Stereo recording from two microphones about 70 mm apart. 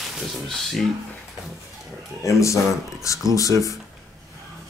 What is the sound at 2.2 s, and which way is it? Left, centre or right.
Speech, left.